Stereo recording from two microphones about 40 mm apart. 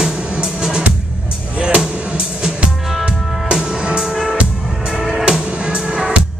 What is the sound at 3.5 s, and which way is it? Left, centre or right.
Music, right.